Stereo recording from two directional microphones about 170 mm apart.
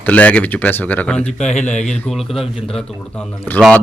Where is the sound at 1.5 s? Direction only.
45° left (ahead or behind).